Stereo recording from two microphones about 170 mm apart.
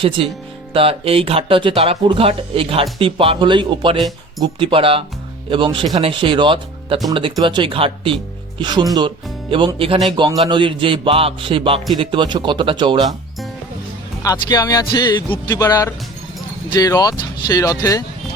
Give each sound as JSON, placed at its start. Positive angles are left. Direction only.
{"t": 0.2, "sound": "speech", "side_deg": -35}
{"t": 14.2, "sound": "speech", "side_deg": 20}